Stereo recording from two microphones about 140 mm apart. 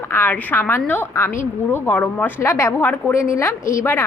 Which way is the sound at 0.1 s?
15° left (ahead or behind).